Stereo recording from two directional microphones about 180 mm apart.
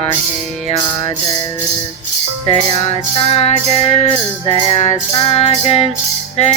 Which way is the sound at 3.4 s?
35° left (ahead or behind).